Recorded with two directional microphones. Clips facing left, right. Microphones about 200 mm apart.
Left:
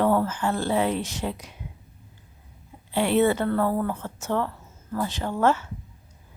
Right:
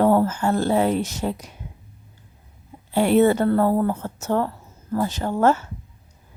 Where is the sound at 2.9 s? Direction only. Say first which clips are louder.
Right 4 dB; 45° right (ahead or behind).